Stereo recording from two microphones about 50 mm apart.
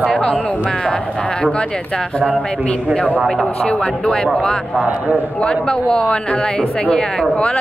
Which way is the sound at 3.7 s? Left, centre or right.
Centre.